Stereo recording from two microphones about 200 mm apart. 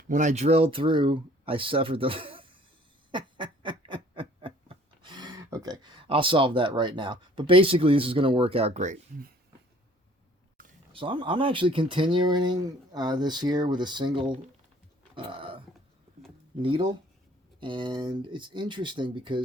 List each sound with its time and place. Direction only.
0.1 s speech: 40° right (ahead or behind)
3.1 s snicker: 25° right (ahead or behind)
10.9 s speech: 25° right (ahead or behind)
15.1 s a sound: 25° right (ahead or behind)
16.6 s speech: 25° right (ahead or behind)